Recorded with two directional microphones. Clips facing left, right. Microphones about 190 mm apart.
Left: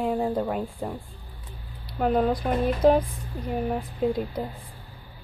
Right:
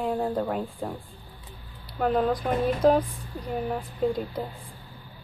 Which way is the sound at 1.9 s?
5° left (ahead or behind).